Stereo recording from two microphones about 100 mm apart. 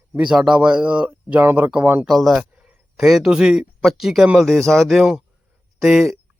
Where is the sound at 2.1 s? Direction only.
Centre (ahead or behind).